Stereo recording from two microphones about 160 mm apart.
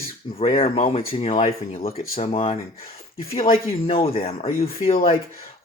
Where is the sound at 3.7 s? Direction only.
35° left (ahead or behind).